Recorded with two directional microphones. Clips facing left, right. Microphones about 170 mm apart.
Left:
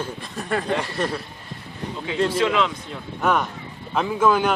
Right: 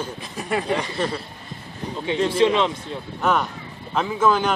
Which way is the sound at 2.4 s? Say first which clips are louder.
Right 5 dB; 25° right (ahead or behind).